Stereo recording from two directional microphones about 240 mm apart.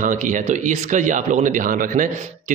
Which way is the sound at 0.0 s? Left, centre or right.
Right.